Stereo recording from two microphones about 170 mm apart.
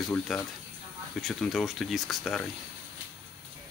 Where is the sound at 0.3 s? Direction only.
Centre (ahead or behind).